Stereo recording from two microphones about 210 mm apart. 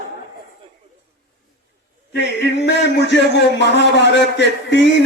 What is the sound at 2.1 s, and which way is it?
A man's voice, 55° left (ahead or behind).